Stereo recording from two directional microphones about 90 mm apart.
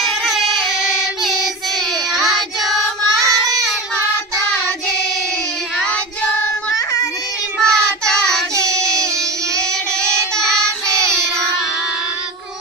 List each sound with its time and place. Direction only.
0.0 s yodeling: centre (ahead or behind)
3.3 s child singing: 40° right (ahead or behind)
7.6 s child singing: 5° left (ahead or behind)
10.3 s child singing: 5° left (ahead or behind)